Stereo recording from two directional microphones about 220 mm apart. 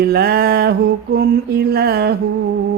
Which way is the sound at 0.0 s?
45° right (ahead or behind).